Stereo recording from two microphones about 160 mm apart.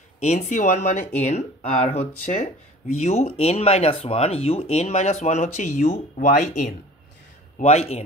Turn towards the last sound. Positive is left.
turn(degrees=40)  # may be behind; listen again after turning